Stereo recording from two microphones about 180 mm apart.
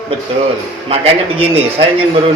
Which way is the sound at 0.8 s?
35° right (ahead or behind).